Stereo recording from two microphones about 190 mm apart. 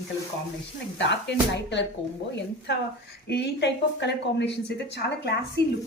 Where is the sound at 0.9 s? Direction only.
65° left (ahead or behind).